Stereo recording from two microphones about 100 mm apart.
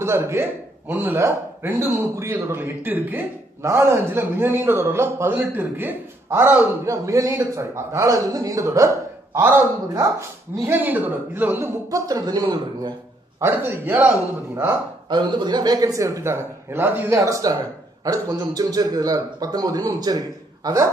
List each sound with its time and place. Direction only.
0.0 s a man's voice: 25° right (ahead or behind)
3.6 s a man's voice: 30° right (ahead or behind)
6.4 s a man's voice: 30° right (ahead or behind)
10.7 s speech: 15° right (ahead or behind)
11.9 s a man's voice: 35° right (ahead or behind)
13.4 s a man's voice: 25° right (ahead or behind)
15.0 s a man's voice: 50° right (ahead or behind); by 17.2 s 20° right (ahead or behind)
17.2 s a man's voice: 35° right (ahead or behind)